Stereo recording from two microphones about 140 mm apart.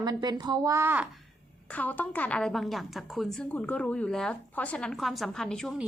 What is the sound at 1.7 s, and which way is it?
A woman's voice, 10° left (ahead or behind).